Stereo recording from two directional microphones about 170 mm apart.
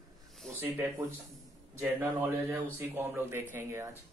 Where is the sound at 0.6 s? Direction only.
10° right (ahead or behind).